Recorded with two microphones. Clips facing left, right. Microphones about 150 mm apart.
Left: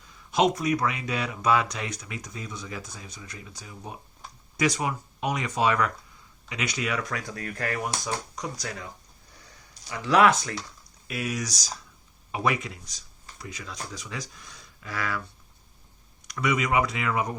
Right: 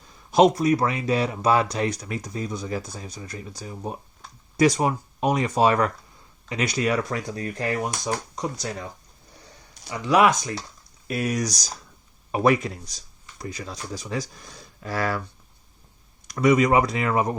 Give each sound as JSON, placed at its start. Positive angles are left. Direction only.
{"t": 0.0, "sound": "speech", "side_deg": -35}
{"t": 10.0, "sound": "speech", "side_deg": -15}
{"t": 11.1, "sound": "speech", "side_deg": -40}
{"t": 16.2, "sound": "speech", "side_deg": -35}